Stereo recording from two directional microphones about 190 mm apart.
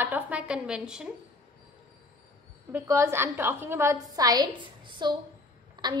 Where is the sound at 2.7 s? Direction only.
15° right (ahead or behind).